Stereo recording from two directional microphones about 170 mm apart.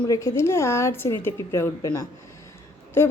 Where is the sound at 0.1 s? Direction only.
20° left (ahead or behind).